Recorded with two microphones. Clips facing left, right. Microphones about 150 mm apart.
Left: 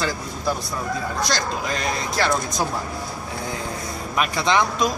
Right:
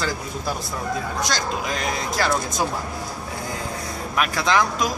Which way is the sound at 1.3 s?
Centre (ahead or behind).